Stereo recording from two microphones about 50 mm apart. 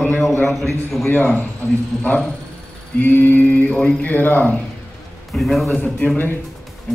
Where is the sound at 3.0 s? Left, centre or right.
Left.